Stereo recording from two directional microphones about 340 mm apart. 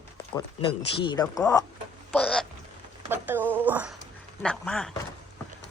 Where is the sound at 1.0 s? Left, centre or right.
Centre.